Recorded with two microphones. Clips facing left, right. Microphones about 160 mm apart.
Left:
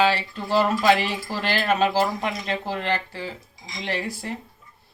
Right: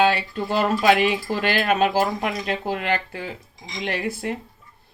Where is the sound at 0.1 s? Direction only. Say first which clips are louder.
Even; 55° right (ahead or behind).